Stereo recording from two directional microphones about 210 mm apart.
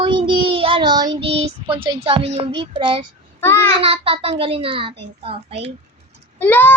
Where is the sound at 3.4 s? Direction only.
10° left (ahead or behind).